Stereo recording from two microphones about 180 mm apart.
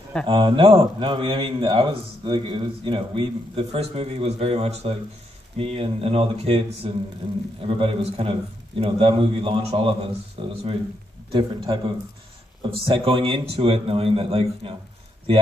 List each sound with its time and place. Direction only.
0.3 s a man's voice: 30° right (ahead or behind)